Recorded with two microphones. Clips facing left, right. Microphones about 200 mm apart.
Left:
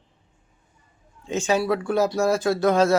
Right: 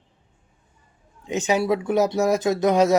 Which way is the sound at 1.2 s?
15° right (ahead or behind).